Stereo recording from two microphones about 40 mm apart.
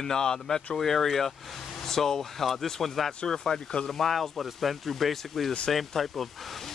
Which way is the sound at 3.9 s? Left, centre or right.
Centre.